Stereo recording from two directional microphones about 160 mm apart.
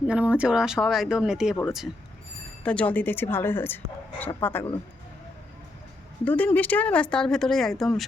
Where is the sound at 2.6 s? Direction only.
10° left (ahead or behind).